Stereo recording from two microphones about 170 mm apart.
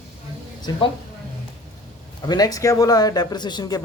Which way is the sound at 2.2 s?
25° left (ahead or behind).